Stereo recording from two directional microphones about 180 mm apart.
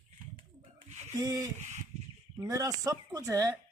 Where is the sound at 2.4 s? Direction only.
20° right (ahead or behind).